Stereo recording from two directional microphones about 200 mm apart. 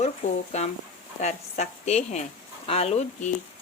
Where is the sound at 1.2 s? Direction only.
35° left (ahead or behind).